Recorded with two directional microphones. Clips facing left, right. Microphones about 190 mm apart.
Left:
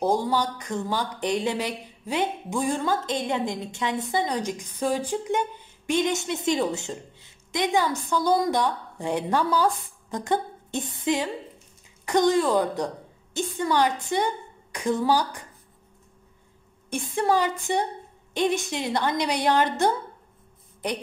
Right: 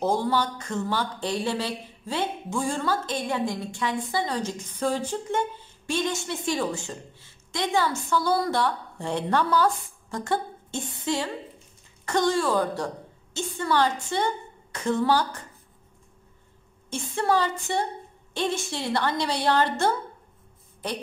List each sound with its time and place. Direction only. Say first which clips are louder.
0.0 s a woman's voice: left 1 dB; 15° left (ahead or behind)
16.9 s speech: left 1 dB; 15° left (ahead or behind)